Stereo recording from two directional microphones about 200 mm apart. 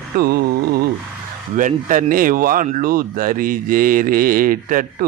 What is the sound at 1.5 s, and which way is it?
Speech, 40° right (ahead or behind).